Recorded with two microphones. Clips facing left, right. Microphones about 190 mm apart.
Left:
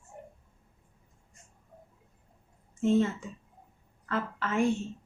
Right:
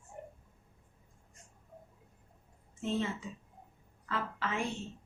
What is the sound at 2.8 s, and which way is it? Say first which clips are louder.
A woman's voice: left 9 dB; 50° left (ahead or behind).